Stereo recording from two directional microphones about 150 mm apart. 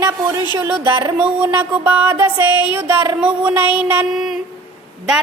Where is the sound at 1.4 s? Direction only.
15° right (ahead or behind).